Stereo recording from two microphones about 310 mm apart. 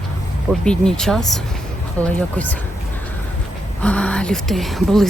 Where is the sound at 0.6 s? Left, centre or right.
Centre.